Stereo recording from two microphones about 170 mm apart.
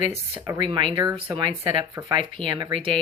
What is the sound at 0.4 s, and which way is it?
Speech, 20° right (ahead or behind).